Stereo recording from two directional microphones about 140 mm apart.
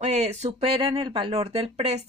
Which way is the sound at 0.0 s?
50° right (ahead or behind).